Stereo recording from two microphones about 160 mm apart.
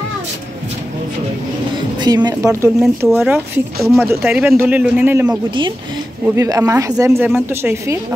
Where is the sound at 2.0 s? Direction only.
25° right (ahead or behind).